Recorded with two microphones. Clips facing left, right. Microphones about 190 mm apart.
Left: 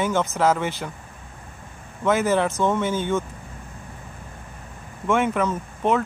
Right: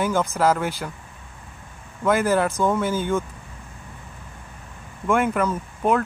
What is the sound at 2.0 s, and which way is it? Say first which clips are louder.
Speech: even; 10° right (ahead or behind).